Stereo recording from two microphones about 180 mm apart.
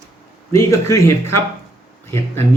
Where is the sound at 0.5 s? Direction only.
15° left (ahead or behind).